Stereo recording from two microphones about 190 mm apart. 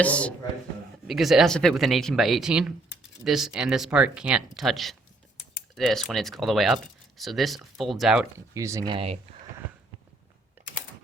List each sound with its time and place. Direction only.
0.0 s speech: 5° left (ahead or behind)
8.5 s speech: 15° right (ahead or behind)